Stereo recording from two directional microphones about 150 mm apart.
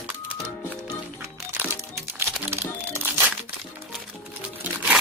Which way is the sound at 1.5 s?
15° right (ahead or behind).